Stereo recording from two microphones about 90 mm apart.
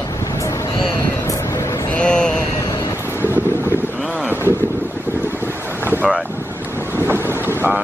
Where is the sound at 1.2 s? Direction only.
35° left (ahead or behind).